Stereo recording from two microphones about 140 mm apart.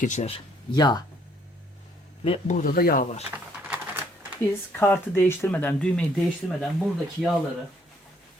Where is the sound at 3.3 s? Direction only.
10° right (ahead or behind).